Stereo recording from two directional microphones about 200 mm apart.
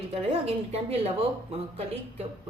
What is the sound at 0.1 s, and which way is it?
A woman's voice, 30° right (ahead or behind).